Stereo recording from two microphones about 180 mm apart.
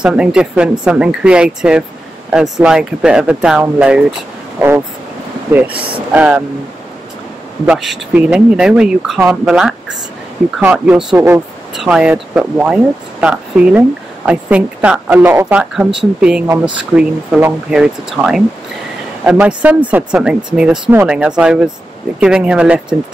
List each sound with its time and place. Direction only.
0.0 s speech: 5° right (ahead or behind)
7.6 s speech: 5° right (ahead or behind)